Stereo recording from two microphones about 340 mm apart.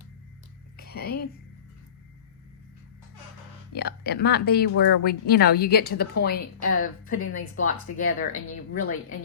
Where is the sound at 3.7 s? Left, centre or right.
Left.